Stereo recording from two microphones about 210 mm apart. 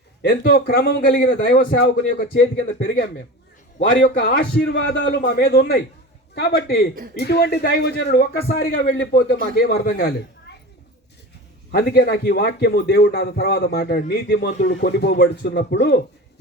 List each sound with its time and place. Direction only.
0.2 s a man's voice: 50° left (ahead or behind)
11.7 s a man's voice: 50° left (ahead or behind)